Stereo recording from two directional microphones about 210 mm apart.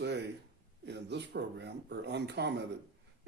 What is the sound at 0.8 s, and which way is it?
Speech, 55° right (ahead or behind).